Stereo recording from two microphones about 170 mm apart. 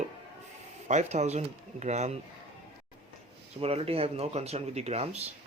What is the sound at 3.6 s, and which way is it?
Speech, 35° right (ahead or behind).